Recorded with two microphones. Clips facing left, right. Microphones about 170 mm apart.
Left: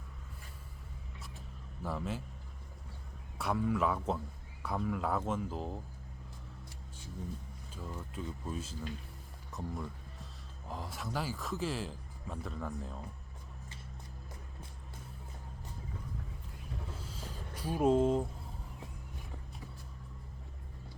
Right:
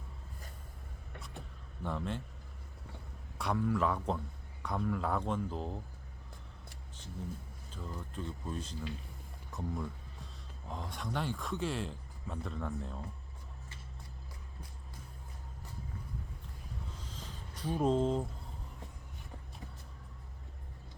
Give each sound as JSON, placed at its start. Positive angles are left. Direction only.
{"t": 1.8, "sound": "speech", "side_deg": 5}
{"t": 3.3, "sound": "speech", "side_deg": 0}
{"t": 7.7, "sound": "speech", "side_deg": 10}
{"t": 17.0, "sound": "a sound", "side_deg": 10}